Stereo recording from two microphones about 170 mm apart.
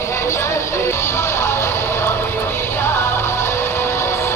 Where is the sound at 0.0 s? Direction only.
15° left (ahead or behind).